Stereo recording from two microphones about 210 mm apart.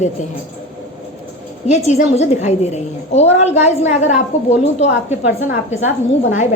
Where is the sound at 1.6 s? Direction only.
30° left (ahead or behind).